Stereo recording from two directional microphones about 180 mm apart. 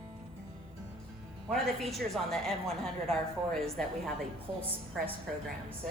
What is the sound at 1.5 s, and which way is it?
A woman's voice, centre (ahead or behind).